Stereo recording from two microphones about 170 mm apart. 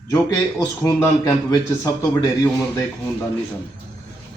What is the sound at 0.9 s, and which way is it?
A man's voice, 20° left (ahead or behind).